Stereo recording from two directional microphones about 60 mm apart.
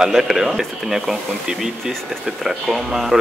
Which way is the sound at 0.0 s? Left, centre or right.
Centre.